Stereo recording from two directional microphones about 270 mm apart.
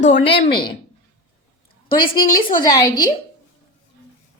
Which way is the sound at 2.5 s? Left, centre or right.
Centre.